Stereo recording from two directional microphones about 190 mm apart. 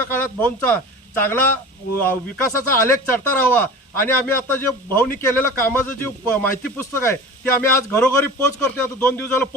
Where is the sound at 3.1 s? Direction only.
10° left (ahead or behind).